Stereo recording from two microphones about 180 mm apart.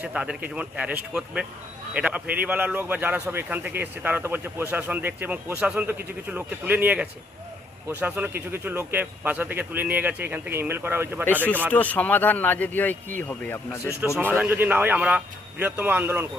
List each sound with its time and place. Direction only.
0.0 s a man's voice: 5° right (ahead or behind)
11.7 s speech: 10° left (ahead or behind)
14.2 s a man's voice: 10° right (ahead or behind)